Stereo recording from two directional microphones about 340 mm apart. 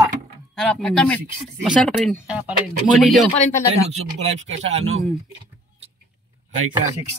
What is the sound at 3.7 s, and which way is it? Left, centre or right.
Speech, centre.